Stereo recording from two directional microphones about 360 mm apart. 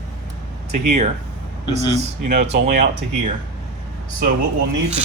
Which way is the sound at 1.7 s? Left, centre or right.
Centre.